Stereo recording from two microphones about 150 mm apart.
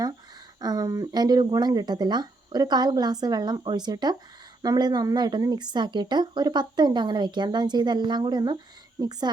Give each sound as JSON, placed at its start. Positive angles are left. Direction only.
{"t": 0.6, "sound": "speech", "side_deg": -25}